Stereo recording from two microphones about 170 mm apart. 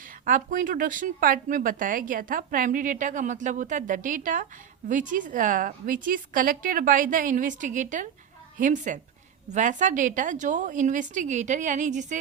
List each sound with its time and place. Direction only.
0.3 s speech: 50° right (ahead or behind)